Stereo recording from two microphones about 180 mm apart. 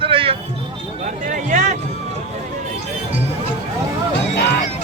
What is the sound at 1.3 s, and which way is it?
Speech, 50° right (ahead or behind).